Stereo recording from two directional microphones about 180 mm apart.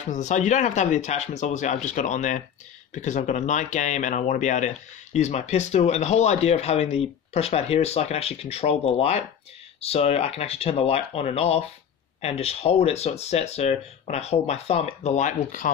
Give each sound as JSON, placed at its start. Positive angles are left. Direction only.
{"t": 0.0, "sound": "speech", "side_deg": 40}
{"t": 15.6, "sound": "speech", "side_deg": 50}